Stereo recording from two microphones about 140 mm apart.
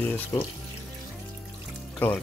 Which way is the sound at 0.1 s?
15° left (ahead or behind).